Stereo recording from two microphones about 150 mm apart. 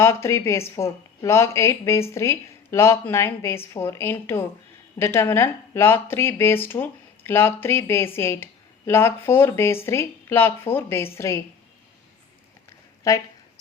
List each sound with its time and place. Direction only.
0.0 s speech: 20° left (ahead or behind)
13.1 s speech: 20° left (ahead or behind)